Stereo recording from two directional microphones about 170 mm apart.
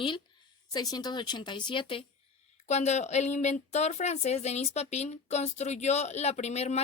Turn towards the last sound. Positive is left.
turn(degrees=40)  # may be behind; listen again after turning